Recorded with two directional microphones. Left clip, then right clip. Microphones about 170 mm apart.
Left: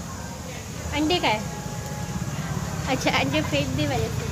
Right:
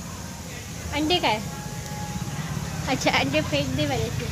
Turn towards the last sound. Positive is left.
turn(degrees=-35)  # may be behind; listen again after turning